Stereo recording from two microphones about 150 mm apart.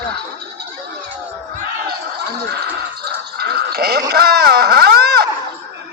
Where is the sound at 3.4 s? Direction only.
90° right.